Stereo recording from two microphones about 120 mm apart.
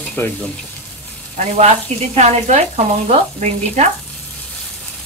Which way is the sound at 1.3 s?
80° right.